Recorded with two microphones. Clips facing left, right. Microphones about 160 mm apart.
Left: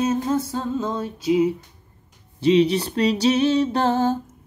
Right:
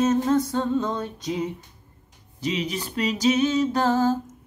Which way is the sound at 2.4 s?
30° left (ahead or behind).